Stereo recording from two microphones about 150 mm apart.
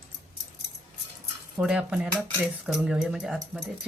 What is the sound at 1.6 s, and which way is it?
Speech, 5° right (ahead or behind).